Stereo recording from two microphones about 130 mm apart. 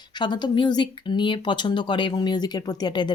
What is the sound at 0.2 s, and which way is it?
Speech, 35° left (ahead or behind).